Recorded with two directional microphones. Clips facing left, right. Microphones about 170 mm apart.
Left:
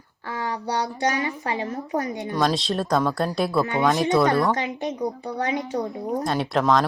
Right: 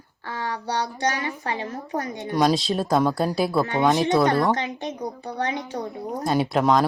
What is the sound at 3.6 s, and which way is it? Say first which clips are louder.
Speech: even; 20° right (ahead or behind).